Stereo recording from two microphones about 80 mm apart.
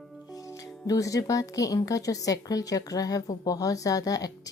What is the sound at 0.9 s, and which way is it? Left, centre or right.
A woman's voice, left.